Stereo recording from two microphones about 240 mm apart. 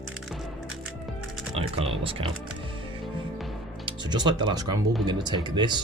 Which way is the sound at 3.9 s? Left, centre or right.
Centre.